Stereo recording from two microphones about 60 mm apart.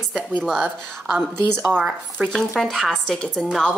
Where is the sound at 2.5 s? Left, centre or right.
Centre.